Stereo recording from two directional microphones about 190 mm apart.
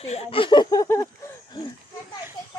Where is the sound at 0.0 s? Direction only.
30° left (ahead or behind); by 1.0 s 15° left (ahead or behind).